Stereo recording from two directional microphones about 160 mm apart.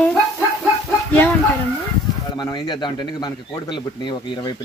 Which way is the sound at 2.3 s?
25° left (ahead or behind).